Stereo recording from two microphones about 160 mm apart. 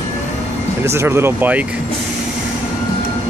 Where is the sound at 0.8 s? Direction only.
15° right (ahead or behind).